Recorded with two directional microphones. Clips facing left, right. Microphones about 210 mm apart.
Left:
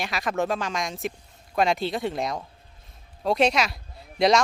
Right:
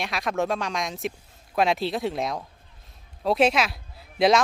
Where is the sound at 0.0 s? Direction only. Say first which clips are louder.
Even; centre (ahead or behind).